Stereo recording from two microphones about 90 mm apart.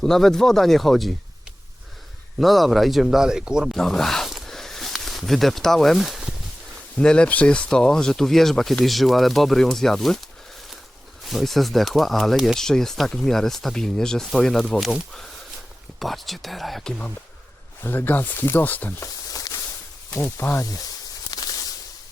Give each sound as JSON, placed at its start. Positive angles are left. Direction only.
{"t": 0.0, "sound": "speech", "side_deg": 5}
{"t": 2.4, "sound": "speech", "side_deg": 0}
{"t": 3.8, "sound": "a sound", "side_deg": 5}
{"t": 6.9, "sound": "speech", "side_deg": 10}
{"t": 11.3, "sound": "speech", "side_deg": 0}
{"t": 17.8, "sound": "speech", "side_deg": 20}
{"t": 19.0, "sound": "a sound", "side_deg": 40}
{"t": 20.3, "sound": "speech", "side_deg": 30}
{"t": 21.2, "sound": "a sound", "side_deg": 45}